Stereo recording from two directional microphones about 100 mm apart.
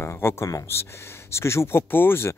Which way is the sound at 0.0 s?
25° left (ahead or behind).